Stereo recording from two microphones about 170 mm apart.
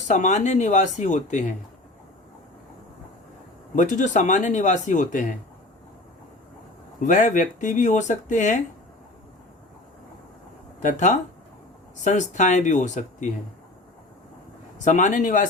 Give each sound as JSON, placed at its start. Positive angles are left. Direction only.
{"t": 0.1, "sound": "speech", "side_deg": 45}
{"t": 3.8, "sound": "speech", "side_deg": 45}
{"t": 7.0, "sound": "speech", "side_deg": 45}
{"t": 10.8, "sound": "speech", "side_deg": 45}
{"t": 14.8, "sound": "speech", "side_deg": 45}